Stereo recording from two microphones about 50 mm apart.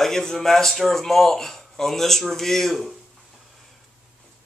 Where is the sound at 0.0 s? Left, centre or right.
Centre.